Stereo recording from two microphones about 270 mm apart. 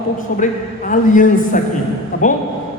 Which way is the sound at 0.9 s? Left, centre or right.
Left.